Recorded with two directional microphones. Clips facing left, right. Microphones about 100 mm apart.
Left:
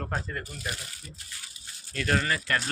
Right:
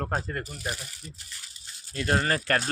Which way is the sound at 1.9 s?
30° right (ahead or behind).